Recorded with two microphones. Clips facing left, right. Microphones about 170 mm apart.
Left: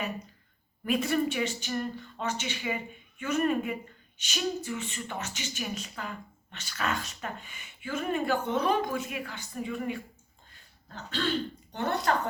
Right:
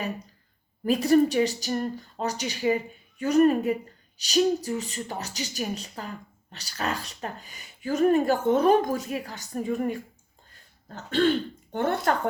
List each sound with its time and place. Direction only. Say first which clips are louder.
0.9 s speech: right 7 dB; 35° right (ahead or behind)